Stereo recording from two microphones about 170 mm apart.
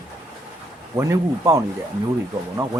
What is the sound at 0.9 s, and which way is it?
Speech, 15° right (ahead or behind).